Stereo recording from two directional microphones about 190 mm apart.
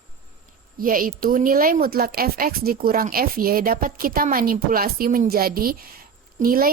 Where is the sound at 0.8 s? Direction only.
45° right (ahead or behind).